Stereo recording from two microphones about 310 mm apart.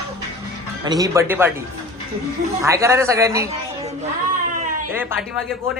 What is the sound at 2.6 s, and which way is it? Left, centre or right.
Speech, centre.